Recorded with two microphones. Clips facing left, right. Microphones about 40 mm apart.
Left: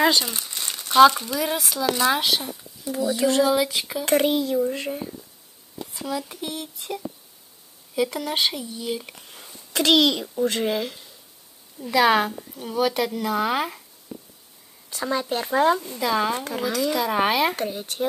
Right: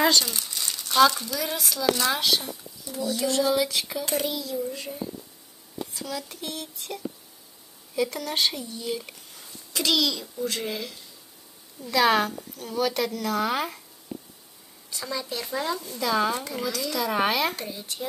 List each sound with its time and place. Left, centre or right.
0.0 s crumpling: centre; by 0.9 s left
0.9 s a woman's voice: left
3.2 s speech: left
3.4 s a woman's voice: centre
4.0 s speech: left
5.9 s a woman's voice: left
9.7 s a child's voice: left
11.8 s a woman's voice: centre
14.9 s speech: left
16.0 s a woman's voice: centre
16.4 s speech: left
17.0 s a woman's voice: centre
17.6 s speech: left